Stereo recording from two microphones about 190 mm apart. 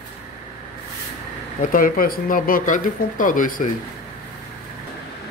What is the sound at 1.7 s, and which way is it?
Speech, 50° left (ahead or behind).